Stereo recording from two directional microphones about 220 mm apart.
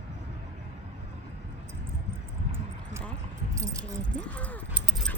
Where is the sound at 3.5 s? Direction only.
15° right (ahead or behind).